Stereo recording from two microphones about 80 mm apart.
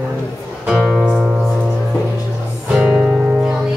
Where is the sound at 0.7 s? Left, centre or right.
Centre.